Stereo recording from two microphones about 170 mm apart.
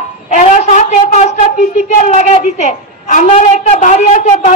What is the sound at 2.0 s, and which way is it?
A woman's voice, 45° left (ahead or behind).